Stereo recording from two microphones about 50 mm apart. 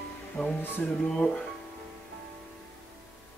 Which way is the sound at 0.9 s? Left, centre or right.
Centre.